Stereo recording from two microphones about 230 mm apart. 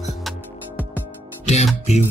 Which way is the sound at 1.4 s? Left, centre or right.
Left.